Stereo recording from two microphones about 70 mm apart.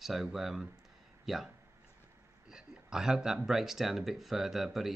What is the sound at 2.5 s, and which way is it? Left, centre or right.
Speech, centre.